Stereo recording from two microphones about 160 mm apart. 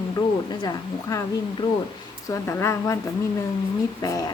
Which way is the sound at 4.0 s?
20° left (ahead or behind).